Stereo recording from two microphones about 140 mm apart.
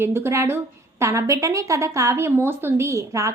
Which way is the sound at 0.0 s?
15° right (ahead or behind).